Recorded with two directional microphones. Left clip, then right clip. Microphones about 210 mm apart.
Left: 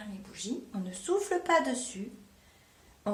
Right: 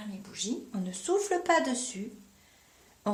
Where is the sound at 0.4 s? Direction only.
30° right (ahead or behind).